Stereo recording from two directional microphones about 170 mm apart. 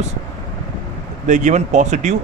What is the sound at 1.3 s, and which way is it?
Speech, 45° right (ahead or behind).